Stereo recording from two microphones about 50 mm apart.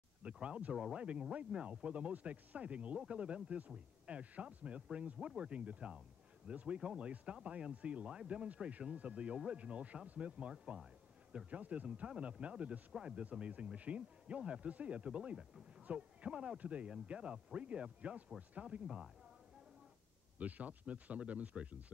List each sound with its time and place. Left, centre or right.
0.2 s speech: right
6.8 s speech: centre
20.3 s speech: right